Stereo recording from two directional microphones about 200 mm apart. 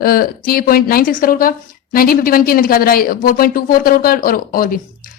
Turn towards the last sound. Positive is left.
turn(degrees=45)  # may be behind; listen again after turning